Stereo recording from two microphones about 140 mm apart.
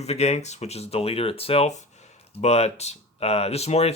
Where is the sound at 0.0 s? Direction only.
50° left (ahead or behind).